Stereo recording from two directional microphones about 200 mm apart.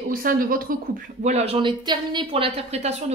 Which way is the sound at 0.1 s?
45° right (ahead or behind).